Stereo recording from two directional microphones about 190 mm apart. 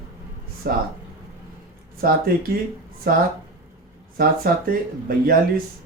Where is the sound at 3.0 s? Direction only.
55° right (ahead or behind).